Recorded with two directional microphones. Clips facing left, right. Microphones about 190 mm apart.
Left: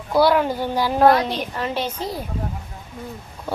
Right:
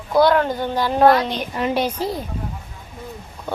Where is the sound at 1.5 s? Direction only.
10° right (ahead or behind).